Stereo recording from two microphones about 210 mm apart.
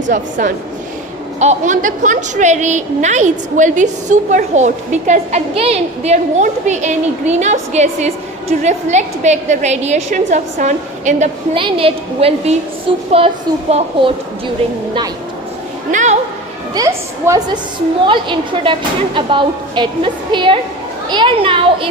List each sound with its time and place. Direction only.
0.1 s a woman's voice: 35° right (ahead or behind)
15.9 s a woman's voice: 35° right (ahead or behind)
16.7 s a woman's voice: 15° right (ahead or behind)